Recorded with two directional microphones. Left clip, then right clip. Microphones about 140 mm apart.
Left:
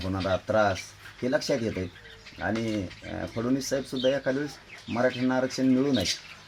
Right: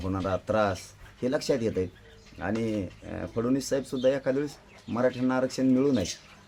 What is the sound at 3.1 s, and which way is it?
Speech, 30° right (ahead or behind).